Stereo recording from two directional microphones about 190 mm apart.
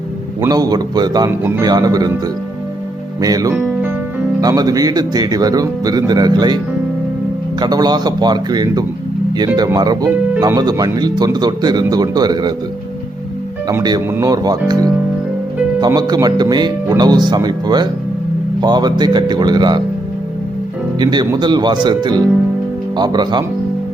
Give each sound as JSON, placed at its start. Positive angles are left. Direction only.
{"t": 0.4, "sound": "speech", "side_deg": -20}
{"t": 3.5, "sound": "music", "side_deg": -10}
{"t": 4.4, "sound": "speech", "side_deg": -20}
{"t": 7.6, "sound": "speech", "side_deg": -20}
{"t": 13.7, "sound": "speech", "side_deg": -20}
{"t": 21.0, "sound": "speech", "side_deg": -25}